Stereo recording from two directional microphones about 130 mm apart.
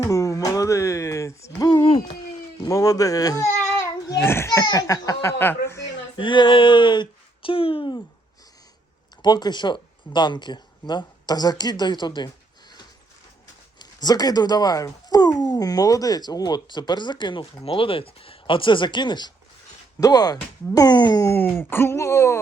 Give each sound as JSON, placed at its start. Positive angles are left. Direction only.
{"t": 0.0, "sound": "a sound", "side_deg": 25}
{"t": 2.6, "sound": "speech", "side_deg": 25}
{"t": 6.1, "sound": "speech", "side_deg": 40}
{"t": 9.2, "sound": "speech", "side_deg": 35}
{"t": 13.7, "sound": "speech", "side_deg": 30}
{"t": 21.3, "sound": "speech", "side_deg": 15}